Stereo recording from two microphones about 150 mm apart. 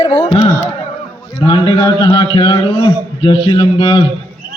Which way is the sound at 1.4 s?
30° left (ahead or behind).